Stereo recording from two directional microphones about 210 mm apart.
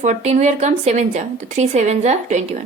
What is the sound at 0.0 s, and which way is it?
A woman's voice, 35° right (ahead or behind).